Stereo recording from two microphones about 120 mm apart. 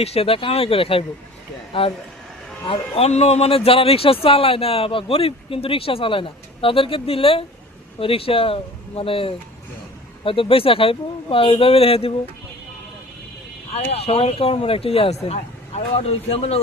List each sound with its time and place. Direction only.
0.0 s speech: 55° left (ahead or behind)
2.6 s speech: 55° left (ahead or behind)
13.7 s speech: 55° left (ahead or behind)